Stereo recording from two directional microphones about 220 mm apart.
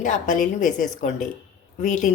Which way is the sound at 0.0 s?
35° left (ahead or behind).